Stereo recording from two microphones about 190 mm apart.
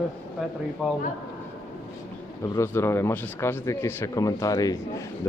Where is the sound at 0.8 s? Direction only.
Centre (ahead or behind).